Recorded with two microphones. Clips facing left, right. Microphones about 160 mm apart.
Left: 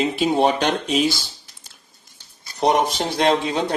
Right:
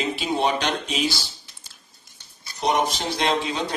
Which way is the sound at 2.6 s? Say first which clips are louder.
Left 4 dB; 40° left (ahead or behind).